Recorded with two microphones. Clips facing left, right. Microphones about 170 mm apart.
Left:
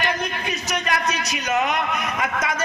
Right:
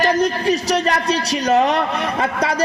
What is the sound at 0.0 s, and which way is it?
A woman's voice, 35° right (ahead or behind).